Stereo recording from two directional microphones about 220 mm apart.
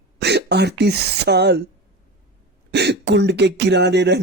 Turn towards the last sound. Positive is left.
turn(degrees=-50)  # may be behind; listen again after turning